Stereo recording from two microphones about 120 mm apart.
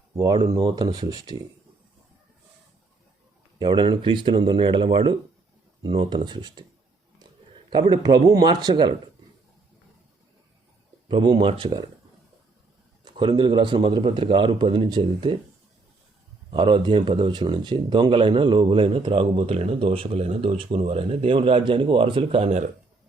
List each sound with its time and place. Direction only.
0.4 s speech: 35° right (ahead or behind)
3.6 s speech: 40° right (ahead or behind)
7.7 s speech: 35° right (ahead or behind)
11.1 s speech: 40° right (ahead or behind)
13.1 s speech: 40° right (ahead or behind)
16.5 s speech: 45° right (ahead or behind)
22.4 s speech: 80° right